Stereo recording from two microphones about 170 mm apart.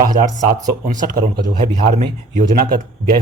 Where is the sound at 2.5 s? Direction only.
60° right (ahead or behind).